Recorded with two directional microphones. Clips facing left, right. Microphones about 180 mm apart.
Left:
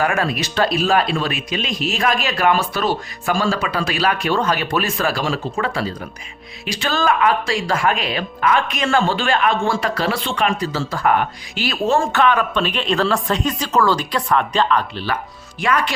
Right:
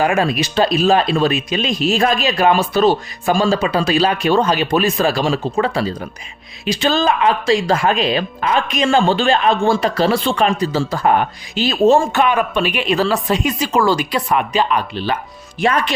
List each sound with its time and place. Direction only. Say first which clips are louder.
0.0 s speech: right 4 dB; 15° right (ahead or behind); by 10.5 s 35° right (ahead or behind)
10.6 s speech: right 4 dB; 15° right (ahead or behind)